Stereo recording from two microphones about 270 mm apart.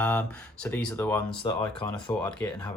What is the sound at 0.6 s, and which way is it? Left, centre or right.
Speech, centre.